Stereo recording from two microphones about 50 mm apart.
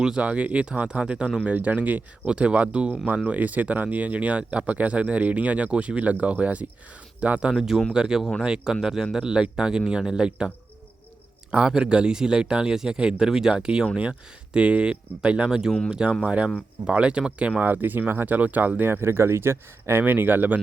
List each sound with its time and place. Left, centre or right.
0.2 s speech: right
7.5 s speech: centre
11.5 s speech: centre
15.4 s speech: centre
17.6 s speech: right
19.0 s speech: right
20.1 s speech: right